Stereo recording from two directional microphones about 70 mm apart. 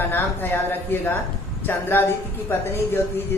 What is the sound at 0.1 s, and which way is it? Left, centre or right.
A woman's voice, left.